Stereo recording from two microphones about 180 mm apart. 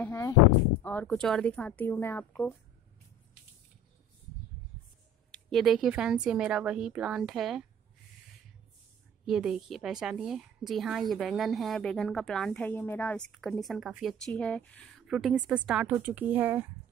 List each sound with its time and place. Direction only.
0.0 s a woman's voice: 15° left (ahead or behind)
5.3 s a woman's voice: centre (ahead or behind)
9.2 s a woman's voice: 5° right (ahead or behind)